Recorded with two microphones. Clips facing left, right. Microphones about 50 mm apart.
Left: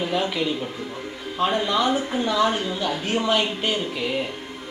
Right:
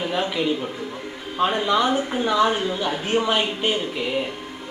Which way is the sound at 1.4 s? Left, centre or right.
Centre.